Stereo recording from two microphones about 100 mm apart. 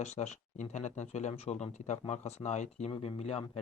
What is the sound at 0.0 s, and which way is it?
Speech, 90° left.